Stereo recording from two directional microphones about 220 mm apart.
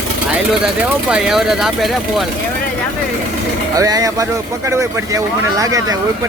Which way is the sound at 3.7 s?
15° right (ahead or behind).